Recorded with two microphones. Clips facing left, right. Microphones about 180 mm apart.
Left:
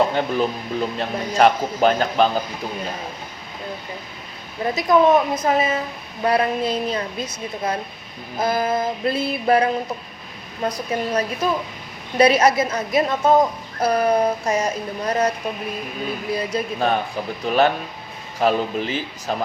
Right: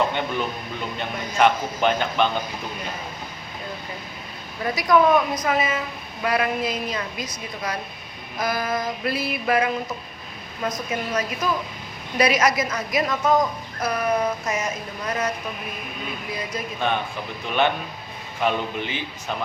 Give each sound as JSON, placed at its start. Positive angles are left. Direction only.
{"t": 0.0, "sound": "a woman's voice", "side_deg": 35}
{"t": 4.6, "sound": "female singing", "side_deg": 25}
{"t": 6.2, "sound": "a woman's voice", "side_deg": 30}
{"t": 8.4, "sound": "female singing", "side_deg": 25}
{"t": 10.6, "sound": "a woman's voice", "side_deg": 30}
{"t": 16.3, "sound": "a woman's voice", "side_deg": 35}